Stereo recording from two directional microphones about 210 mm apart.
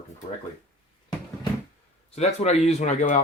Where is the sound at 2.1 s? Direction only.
30° left (ahead or behind).